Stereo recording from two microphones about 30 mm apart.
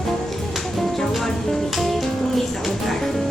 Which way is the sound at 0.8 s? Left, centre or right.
Centre.